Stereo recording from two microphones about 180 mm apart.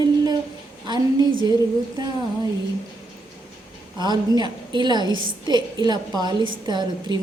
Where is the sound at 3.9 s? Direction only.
25° right (ahead or behind).